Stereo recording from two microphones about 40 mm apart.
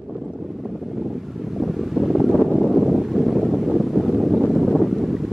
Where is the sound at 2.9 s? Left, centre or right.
Centre.